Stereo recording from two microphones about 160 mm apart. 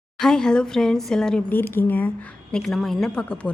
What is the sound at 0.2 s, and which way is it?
Speech, 5° left (ahead or behind).